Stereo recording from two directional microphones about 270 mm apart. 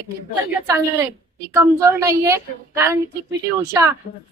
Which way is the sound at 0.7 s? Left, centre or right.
Centre.